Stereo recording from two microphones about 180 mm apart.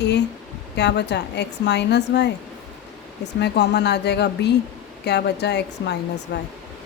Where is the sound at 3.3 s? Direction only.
70° left (ahead or behind).